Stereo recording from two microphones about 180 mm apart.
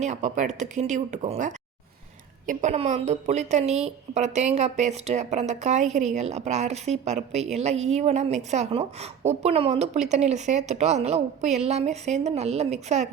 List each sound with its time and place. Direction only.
0.0 s a woman's voice: 40° right (ahead or behind)